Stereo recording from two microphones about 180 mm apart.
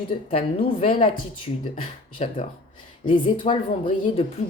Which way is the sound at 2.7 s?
25° left (ahead or behind).